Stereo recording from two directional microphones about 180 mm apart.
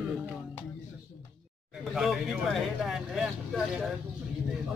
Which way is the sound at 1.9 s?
Centre (ahead or behind).